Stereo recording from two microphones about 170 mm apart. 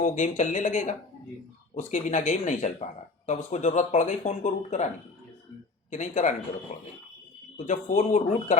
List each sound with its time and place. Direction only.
0.0 s speech: 45° left (ahead or behind)
5.9 s speech: 45° left (ahead or behind)